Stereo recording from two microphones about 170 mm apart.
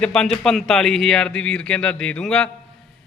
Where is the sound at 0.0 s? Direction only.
5° left (ahead or behind).